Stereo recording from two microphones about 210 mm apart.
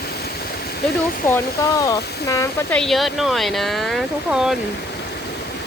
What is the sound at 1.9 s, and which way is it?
Speech, 15° left (ahead or behind).